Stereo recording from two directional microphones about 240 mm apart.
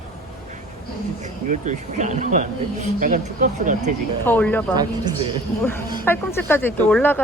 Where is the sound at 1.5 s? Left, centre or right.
Right.